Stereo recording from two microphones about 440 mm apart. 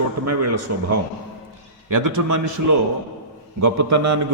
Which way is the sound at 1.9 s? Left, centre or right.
Right.